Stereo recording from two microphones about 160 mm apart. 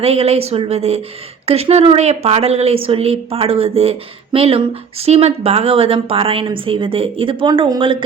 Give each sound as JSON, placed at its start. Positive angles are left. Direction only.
{"t": 0.0, "sound": "a woman's voice", "side_deg": -40}